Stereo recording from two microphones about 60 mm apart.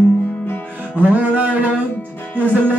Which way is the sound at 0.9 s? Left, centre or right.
Right.